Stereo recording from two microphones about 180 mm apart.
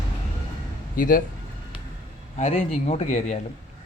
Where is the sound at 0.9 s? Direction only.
50° left (ahead or behind).